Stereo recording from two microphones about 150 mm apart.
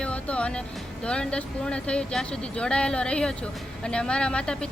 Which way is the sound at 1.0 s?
5° left (ahead or behind).